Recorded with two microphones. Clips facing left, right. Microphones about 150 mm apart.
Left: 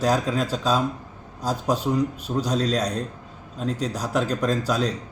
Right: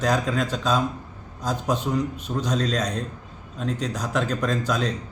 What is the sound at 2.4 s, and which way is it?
Speech, 35° left (ahead or behind).